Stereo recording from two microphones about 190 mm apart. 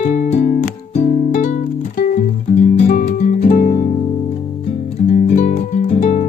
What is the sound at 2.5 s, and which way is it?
Guitar, 40° left (ahead or behind).